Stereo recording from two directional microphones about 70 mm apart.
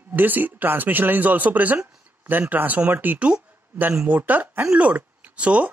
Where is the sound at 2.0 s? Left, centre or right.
Right.